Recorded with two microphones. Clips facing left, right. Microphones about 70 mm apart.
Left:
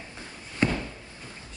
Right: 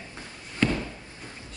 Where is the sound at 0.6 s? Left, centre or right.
Left.